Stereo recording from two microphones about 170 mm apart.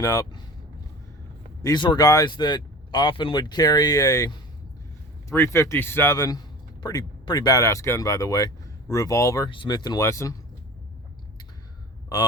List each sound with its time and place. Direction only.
0.0 s speech: 20° left (ahead or behind)
1.6 s a man's voice: 25° left (ahead or behind)